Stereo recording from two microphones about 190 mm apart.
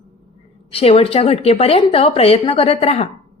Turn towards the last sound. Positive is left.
turn(degrees=35)  # may be behind; listen again after turning